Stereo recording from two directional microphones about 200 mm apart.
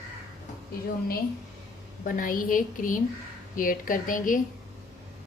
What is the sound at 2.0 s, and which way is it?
A woman's voice, 45° left (ahead or behind).